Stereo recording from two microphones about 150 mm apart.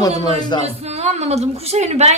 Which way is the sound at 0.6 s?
45° right (ahead or behind).